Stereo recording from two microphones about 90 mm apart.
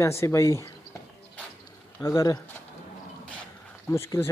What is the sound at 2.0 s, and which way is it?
Speech, 35° left (ahead or behind).